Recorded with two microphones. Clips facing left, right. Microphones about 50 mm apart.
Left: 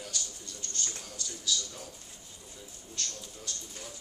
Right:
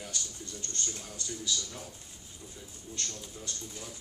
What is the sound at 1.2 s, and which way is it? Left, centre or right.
Speech, right.